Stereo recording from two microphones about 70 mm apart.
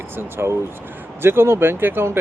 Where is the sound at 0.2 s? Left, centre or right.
Right.